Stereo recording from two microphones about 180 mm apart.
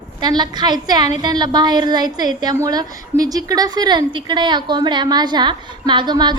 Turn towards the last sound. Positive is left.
turn(degrees=-25)  # may be behind; listen again after turning